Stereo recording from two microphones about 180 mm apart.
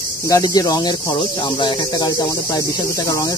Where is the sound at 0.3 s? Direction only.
20° left (ahead or behind).